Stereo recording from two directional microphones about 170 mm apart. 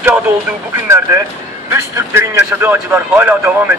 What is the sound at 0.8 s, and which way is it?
Vehicle, 15° right (ahead or behind).